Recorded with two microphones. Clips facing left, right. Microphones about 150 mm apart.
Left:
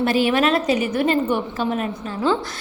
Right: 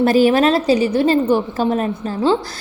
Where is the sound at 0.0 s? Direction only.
40° right (ahead or behind).